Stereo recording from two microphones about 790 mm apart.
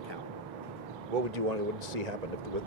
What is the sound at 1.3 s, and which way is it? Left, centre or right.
Speech, right.